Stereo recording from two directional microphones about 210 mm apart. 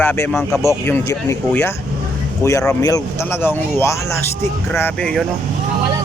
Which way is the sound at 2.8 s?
15° left (ahead or behind).